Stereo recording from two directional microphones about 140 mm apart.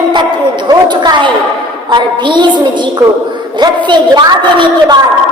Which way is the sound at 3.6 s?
30° right (ahead or behind).